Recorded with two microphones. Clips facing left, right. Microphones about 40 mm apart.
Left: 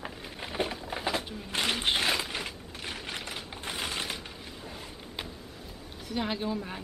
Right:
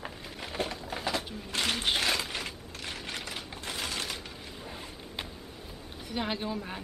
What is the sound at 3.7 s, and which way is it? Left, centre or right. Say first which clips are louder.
Crushing: left 1 dB; centre.